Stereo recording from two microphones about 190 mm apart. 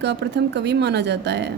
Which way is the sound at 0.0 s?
65° right (ahead or behind).